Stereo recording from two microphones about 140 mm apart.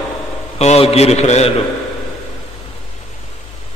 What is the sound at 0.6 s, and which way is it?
Speech, 50° left (ahead or behind).